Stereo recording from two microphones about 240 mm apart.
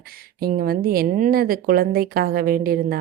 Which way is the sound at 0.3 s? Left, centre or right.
Right.